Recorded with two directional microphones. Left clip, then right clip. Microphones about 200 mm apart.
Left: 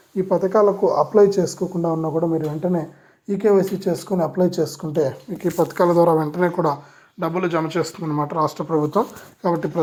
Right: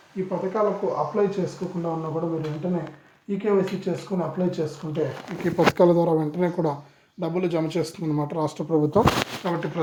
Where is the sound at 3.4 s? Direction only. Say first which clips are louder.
Left 6 dB; 25° left (ahead or behind).